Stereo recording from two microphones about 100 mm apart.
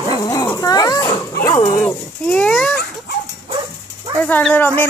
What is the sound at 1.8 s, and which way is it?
Speech, 10° left (ahead or behind).